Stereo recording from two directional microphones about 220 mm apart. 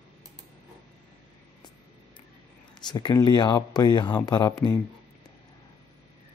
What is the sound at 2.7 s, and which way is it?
Speech, 20° left (ahead or behind).